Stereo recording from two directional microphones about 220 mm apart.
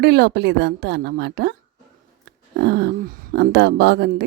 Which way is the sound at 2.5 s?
45° right (ahead or behind).